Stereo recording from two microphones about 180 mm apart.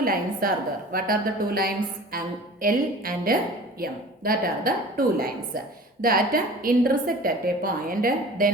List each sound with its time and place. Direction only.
0.0 s a woman's voice: 55° right (ahead or behind)